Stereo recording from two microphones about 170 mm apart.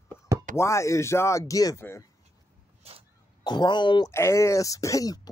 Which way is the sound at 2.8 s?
35° right (ahead or behind).